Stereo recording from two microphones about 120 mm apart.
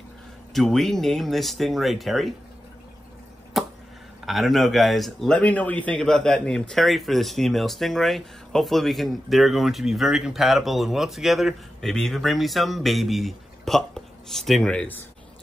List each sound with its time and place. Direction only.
0.5 s speech: centre (ahead or behind)
3.6 s a sound: centre (ahead or behind)
4.3 s speech: centre (ahead or behind)
5.4 s speech: 15° left (ahead or behind)